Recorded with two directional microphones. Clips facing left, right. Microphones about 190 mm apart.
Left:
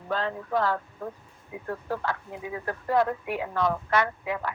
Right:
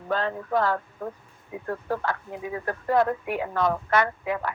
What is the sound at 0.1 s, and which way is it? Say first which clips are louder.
Speech: right 2 dB; 55° right (ahead or behind).